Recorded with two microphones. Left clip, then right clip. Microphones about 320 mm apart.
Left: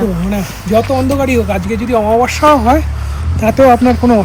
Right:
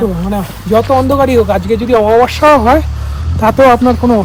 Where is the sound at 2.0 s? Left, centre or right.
Right.